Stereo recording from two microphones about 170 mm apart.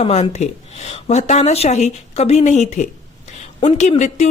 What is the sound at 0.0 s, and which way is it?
A woman's voice, 40° left (ahead or behind).